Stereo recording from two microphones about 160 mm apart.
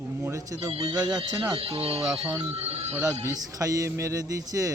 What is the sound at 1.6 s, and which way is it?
Speech, 35° right (ahead or behind).